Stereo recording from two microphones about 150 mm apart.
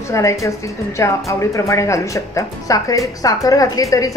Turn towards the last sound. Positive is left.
turn(degrees=20)  # may be behind; listen again after turning